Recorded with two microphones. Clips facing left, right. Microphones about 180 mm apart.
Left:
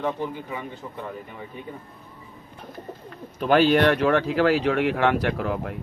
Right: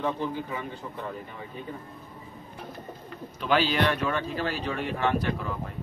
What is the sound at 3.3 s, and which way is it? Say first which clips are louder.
Speech: left 7 dB; 50° left (ahead or behind).